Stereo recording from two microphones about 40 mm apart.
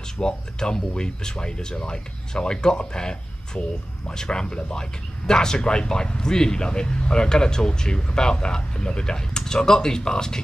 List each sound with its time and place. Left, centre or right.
0.2 s speech: centre